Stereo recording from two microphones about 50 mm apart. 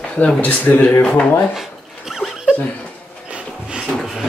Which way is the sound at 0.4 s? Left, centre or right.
Left.